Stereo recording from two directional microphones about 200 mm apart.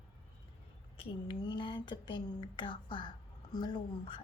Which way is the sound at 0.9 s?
20° left (ahead or behind).